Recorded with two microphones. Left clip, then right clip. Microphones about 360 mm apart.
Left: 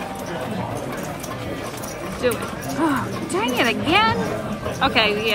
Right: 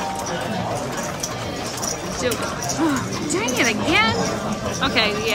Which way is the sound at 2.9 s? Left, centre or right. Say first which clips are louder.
Even; centre.